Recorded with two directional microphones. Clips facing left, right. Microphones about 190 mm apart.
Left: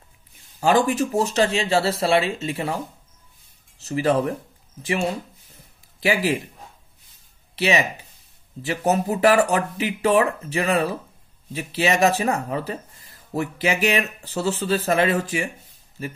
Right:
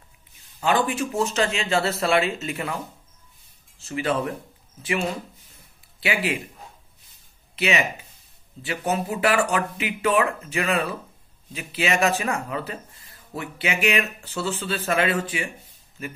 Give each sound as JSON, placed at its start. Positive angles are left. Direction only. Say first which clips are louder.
{"t": 0.6, "sound": "speech", "louder": "left 4 dB", "side_deg": 45}
{"t": 3.8, "sound": "speech", "louder": "left 5 dB", "side_deg": 40}
{"t": 5.9, "sound": "speech", "louder": "left 4 dB", "side_deg": 40}
{"t": 7.5, "sound": "speech", "louder": "left 3 dB", "side_deg": 35}